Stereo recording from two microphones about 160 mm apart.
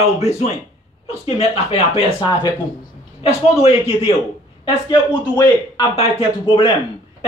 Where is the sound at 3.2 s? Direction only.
40° left (ahead or behind).